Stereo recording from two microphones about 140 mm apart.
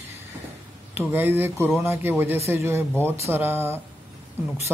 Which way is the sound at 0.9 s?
15° right (ahead or behind).